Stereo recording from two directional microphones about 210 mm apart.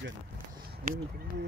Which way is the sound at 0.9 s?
40° right (ahead or behind).